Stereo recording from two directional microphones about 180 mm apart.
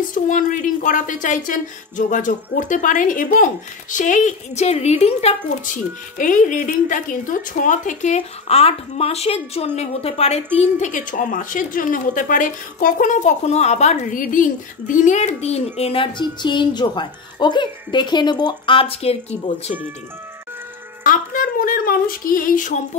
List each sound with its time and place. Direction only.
0.1 s a woman's voice: 50° left (ahead or behind)
21.0 s a woman's voice: 50° left (ahead or behind)